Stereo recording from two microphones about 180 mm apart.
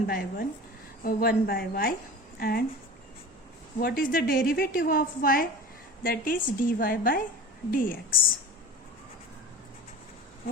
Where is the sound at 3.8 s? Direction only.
55° left (ahead or behind).